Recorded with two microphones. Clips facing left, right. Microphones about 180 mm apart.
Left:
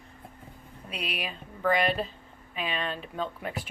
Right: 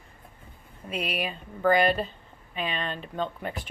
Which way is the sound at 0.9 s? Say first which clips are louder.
Right 5 dB; centre (ahead or behind).